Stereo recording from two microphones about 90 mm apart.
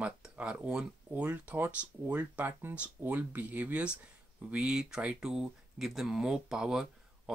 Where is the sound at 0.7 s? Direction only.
10° right (ahead or behind).